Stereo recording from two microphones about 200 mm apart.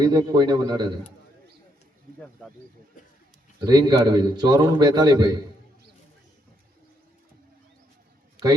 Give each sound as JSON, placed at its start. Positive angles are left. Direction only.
{"t": 0.0, "sound": "a man's voice", "side_deg": -20}
{"t": 3.6, "sound": "a man's voice", "side_deg": -20}